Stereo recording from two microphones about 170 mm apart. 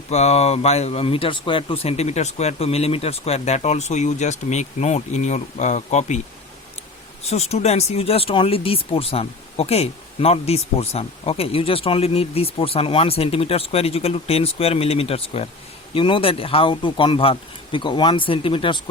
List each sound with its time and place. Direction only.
0.1 s speech: 40° left (ahead or behind)
7.3 s speech: 40° left (ahead or behind)